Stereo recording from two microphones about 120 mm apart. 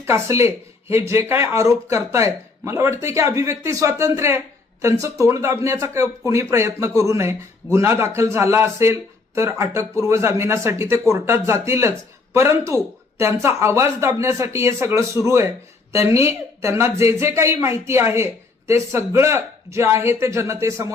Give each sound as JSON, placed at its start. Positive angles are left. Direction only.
{"t": 0.0, "sound": "speech", "side_deg": -25}